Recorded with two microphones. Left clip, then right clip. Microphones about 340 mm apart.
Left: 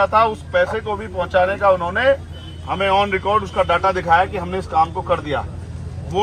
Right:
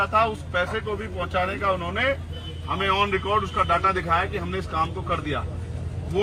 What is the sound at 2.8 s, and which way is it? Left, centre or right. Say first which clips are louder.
Speech: left 6 dB; centre.